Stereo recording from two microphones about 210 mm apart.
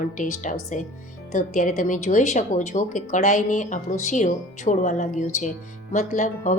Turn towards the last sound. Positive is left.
turn(degrees=35)  # may be behind; listen again after turning